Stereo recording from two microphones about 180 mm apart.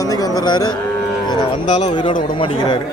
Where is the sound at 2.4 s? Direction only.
25° left (ahead or behind).